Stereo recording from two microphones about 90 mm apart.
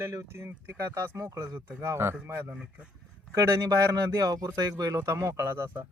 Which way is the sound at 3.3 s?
40° right (ahead or behind).